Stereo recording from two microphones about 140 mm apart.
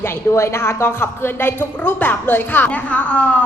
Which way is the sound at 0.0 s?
20° left (ahead or behind).